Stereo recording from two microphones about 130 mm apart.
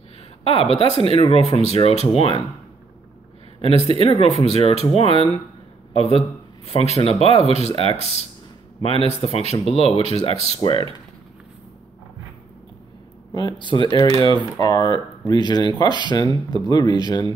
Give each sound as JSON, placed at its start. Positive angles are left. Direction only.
{"t": 0.4, "sound": "speech", "side_deg": 50}
{"t": 3.9, "sound": "speech", "side_deg": 50}
{"t": 13.3, "sound": "speech", "side_deg": 35}
{"t": 14.0, "sound": "speech", "side_deg": -50}
{"t": 14.3, "sound": "speech", "side_deg": 35}